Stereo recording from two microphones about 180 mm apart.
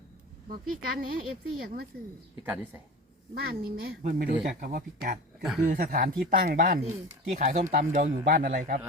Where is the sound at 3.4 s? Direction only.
55° right (ahead or behind).